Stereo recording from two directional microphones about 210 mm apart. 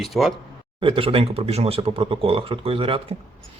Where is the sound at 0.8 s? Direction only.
25° right (ahead or behind).